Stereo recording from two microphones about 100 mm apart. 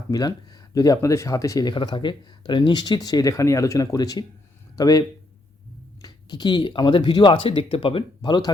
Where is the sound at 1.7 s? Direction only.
50° left (ahead or behind).